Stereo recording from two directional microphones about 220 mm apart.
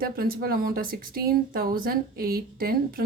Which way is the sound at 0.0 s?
40° right (ahead or behind).